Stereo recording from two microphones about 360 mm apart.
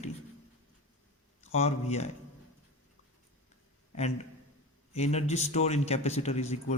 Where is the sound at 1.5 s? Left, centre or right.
Centre.